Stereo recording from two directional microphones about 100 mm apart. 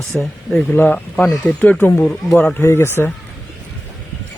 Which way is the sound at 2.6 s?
25° left (ahead or behind).